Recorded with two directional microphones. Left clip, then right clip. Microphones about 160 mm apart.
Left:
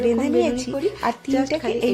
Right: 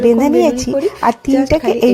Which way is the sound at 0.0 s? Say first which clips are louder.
Right 8 dB; 45° right (ahead or behind).